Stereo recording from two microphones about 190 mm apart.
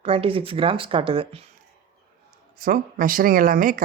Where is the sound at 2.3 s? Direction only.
50° right (ahead or behind).